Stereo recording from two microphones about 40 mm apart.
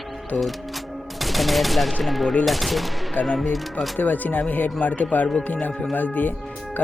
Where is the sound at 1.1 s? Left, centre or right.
Centre.